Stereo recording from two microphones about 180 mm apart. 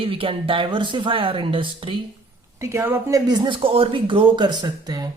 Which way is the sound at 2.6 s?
15° right (ahead or behind).